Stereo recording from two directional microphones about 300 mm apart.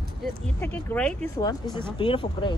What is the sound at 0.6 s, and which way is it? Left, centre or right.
Speech, centre.